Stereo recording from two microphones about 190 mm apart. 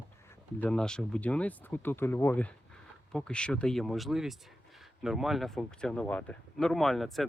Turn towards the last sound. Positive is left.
turn(degrees=0)  # may be behind; listen again after turning